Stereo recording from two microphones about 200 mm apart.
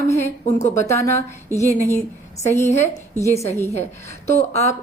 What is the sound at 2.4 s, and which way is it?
Speech, 15° left (ahead or behind).